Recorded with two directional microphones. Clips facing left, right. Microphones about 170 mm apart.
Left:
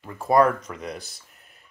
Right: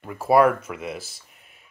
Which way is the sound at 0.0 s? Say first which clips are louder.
Right 2 dB; 10° right (ahead or behind).